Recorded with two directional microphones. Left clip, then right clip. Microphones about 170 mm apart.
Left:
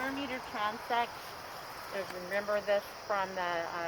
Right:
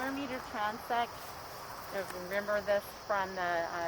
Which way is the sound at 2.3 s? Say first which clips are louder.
Left 1 dB; 20° left (ahead or behind).